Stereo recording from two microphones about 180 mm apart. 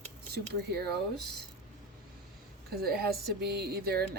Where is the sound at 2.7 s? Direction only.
60° right (ahead or behind).